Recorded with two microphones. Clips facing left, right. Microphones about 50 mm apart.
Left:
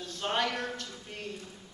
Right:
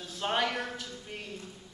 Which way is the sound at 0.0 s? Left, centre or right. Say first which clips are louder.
Right 1 dB; centre.